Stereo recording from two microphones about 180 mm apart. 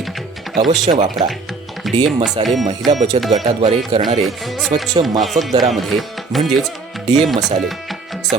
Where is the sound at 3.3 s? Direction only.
35° right (ahead or behind).